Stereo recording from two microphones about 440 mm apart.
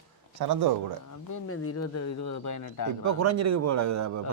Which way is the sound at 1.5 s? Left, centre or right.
Left.